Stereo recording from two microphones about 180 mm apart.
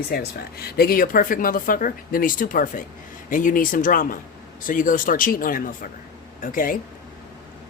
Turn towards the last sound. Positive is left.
turn(degrees=50)  # may be behind; listen again after turning